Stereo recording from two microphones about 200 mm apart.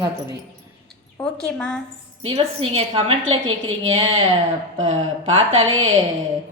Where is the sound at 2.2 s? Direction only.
30° right (ahead or behind).